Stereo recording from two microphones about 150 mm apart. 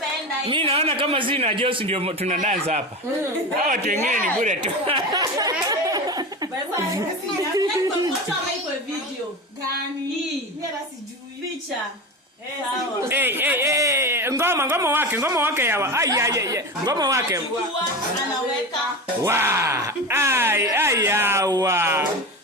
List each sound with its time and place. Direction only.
0.4 s speech: 40° right (ahead or behind)
3.6 s speech: 65° right (ahead or behind)
4.9 s a sound: 30° right (ahead or behind)
7.5 s speech: 25° right (ahead or behind)
13.1 s speech: 15° right (ahead or behind)
19.2 s speech: 20° right (ahead or behind)